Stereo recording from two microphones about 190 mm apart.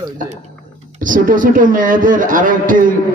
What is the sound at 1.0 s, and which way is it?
A man's voice, 45° right (ahead or behind).